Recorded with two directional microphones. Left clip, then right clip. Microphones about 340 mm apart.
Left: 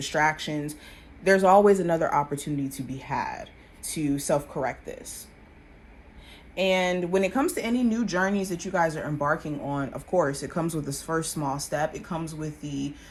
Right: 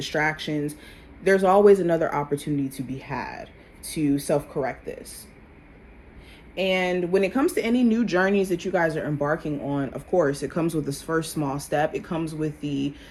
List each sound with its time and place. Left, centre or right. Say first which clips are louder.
0.0 s speech: even; left
6.6 s speech: right 1 dB; left
7.8 s speech: right 3 dB; centre
10.3 s speech: right 4 dB; centre